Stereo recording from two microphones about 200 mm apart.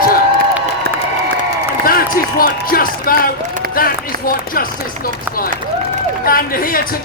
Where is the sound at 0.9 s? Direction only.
50° right (ahead or behind).